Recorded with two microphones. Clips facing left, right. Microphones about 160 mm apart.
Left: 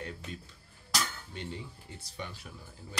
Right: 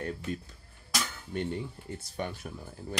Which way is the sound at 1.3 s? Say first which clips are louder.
Right 8 dB; 55° right (ahead or behind).